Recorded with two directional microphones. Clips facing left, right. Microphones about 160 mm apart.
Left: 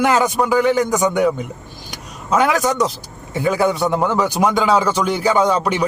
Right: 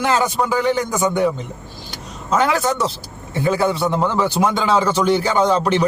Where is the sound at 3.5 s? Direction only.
15° left (ahead or behind).